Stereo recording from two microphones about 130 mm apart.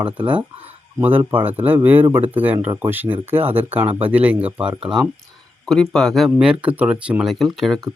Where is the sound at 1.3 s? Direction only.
15° right (ahead or behind).